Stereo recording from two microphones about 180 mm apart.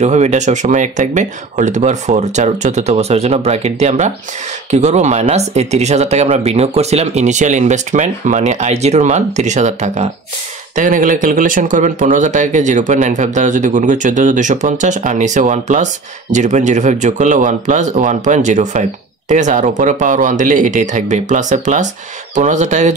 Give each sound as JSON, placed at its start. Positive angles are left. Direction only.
{"t": 0.0, "sound": "speech", "side_deg": -40}